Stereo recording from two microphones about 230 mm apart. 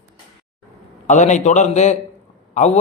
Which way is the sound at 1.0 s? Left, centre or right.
Left.